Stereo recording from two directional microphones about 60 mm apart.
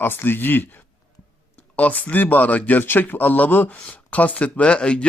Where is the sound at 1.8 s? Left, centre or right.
Left.